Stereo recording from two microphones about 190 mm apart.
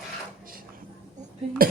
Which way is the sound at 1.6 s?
50° right (ahead or behind).